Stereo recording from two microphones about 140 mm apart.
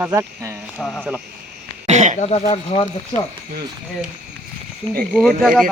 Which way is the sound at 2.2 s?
50° left (ahead or behind).